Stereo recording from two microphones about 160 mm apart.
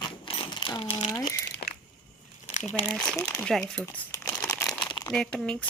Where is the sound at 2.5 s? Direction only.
40° left (ahead or behind).